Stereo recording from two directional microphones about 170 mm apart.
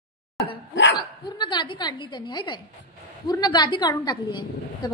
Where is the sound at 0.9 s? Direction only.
25° left (ahead or behind).